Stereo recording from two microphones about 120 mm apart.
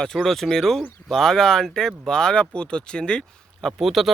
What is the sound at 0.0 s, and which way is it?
Speech, 5° left (ahead or behind).